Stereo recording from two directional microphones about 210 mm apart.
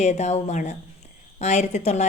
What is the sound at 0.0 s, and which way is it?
A woman's voice, 35° left (ahead or behind).